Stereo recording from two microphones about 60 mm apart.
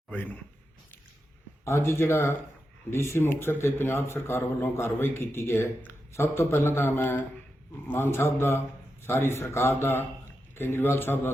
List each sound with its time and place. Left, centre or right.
0.1 s a man's voice: left
1.6 s a man's voice: left